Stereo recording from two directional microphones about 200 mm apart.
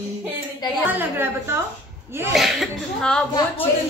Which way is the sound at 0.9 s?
10° right (ahead or behind).